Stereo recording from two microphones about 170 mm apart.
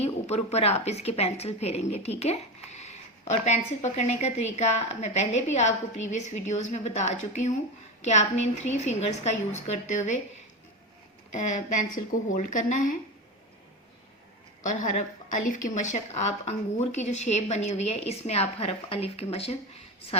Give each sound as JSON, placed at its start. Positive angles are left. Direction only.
{"t": 0.0, "sound": "a woman's voice", "side_deg": 40}
{"t": 11.3, "sound": "a woman's voice", "side_deg": 45}
{"t": 14.6, "sound": "a woman's voice", "side_deg": 50}